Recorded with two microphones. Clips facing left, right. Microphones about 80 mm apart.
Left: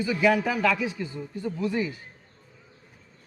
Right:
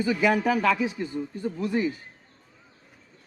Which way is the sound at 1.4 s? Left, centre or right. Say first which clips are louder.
Even; right.